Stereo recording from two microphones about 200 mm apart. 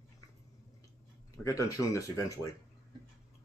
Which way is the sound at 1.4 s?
15° left (ahead or behind).